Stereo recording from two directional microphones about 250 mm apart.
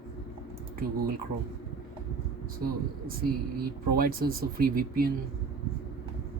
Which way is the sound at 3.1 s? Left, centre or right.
Right.